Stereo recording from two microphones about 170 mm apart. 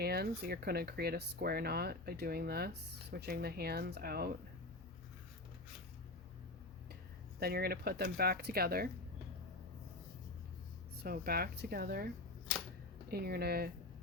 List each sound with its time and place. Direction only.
0.0 s speech: 70° right (ahead or behind)
7.3 s speech: 65° right (ahead or behind)
11.0 s speech: 60° right (ahead or behind)
13.1 s speech: 70° right (ahead or behind)